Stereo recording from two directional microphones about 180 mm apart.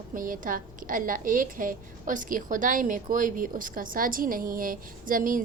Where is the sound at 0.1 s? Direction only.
50° right (ahead or behind).